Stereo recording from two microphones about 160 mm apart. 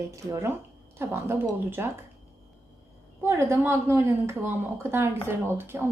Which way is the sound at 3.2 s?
15° right (ahead or behind).